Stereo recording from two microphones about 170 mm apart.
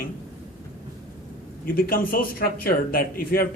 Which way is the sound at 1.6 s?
60° left (ahead or behind).